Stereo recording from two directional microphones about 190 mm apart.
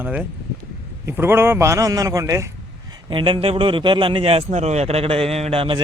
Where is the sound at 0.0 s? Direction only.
10° right (ahead or behind).